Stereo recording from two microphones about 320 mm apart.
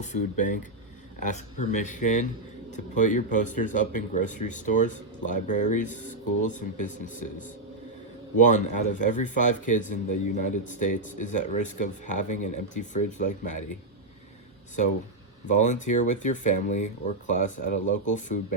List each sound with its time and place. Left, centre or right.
0.0 s speech: left
8.4 s speech: left
15.4 s speech: left